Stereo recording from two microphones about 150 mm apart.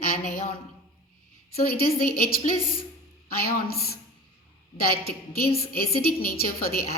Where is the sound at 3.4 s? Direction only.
90° left.